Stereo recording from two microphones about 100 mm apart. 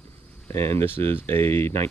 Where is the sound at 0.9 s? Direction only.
70° right (ahead or behind).